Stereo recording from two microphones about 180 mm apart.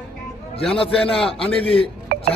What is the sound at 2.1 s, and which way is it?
Music, 55° right (ahead or behind).